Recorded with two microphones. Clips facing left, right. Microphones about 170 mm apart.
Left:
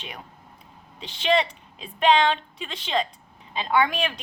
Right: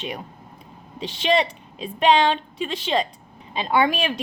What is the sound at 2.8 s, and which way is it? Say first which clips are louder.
Speech: right 2 dB; 15° right (ahead or behind).